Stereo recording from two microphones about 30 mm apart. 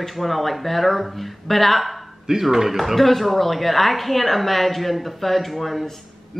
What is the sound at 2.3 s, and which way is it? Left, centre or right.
Speech, centre.